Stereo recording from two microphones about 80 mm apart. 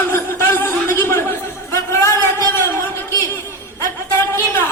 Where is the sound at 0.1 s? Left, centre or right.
Left.